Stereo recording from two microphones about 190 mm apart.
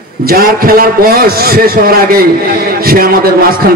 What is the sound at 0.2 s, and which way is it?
A man's voice, 50° right (ahead or behind).